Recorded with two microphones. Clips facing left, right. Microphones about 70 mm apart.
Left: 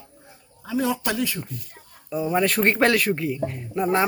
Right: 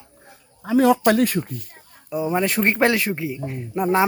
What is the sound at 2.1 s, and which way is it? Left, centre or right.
Speech, centre.